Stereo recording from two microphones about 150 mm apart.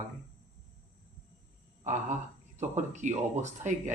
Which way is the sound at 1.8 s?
55° right (ahead or behind).